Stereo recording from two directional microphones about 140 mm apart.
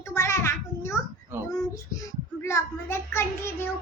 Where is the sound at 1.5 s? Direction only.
25° left (ahead or behind).